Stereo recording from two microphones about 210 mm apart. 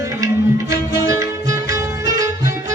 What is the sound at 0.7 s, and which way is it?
Music, 15° right (ahead or behind).